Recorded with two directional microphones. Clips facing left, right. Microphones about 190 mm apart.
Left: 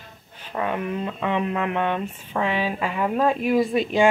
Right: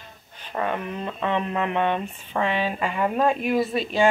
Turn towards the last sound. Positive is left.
turn(degrees=15)  # may be behind; listen again after turning